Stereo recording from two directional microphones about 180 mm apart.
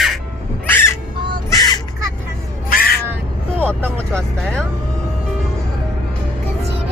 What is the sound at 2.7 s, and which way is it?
Crow, 55° left (ahead or behind).